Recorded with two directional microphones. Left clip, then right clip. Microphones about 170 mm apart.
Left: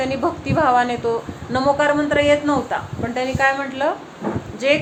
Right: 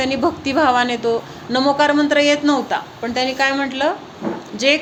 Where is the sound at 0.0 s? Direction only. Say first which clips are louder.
Right 3 dB; 40° right (ahead or behind).